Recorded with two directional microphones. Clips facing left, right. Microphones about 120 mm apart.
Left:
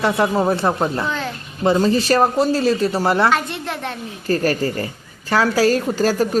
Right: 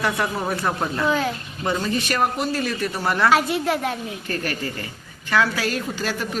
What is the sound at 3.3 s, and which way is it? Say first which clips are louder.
Speech: right 2 dB; 5° right (ahead or behind).